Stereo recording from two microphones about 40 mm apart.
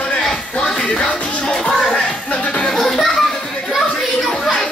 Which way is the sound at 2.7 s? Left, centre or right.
Centre.